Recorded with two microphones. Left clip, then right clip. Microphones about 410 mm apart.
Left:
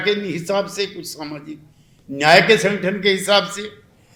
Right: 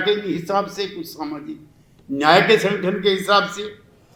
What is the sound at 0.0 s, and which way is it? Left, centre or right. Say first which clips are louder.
A man's voice: even; left.